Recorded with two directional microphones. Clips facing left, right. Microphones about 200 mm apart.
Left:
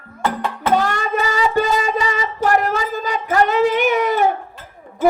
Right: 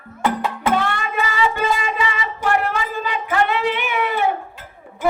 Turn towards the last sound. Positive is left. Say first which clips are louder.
# left 5 dB
turn(degrees=40)  # may be behind; listen again after turning